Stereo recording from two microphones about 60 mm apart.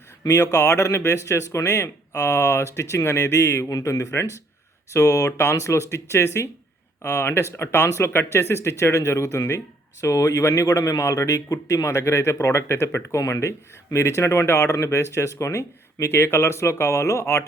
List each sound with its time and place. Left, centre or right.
0.3 s speech: left
0.5 s speech: left
5.4 s speech: left
13.9 s speech: left